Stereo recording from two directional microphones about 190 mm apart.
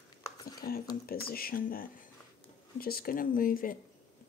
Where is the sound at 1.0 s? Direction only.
50° left (ahead or behind).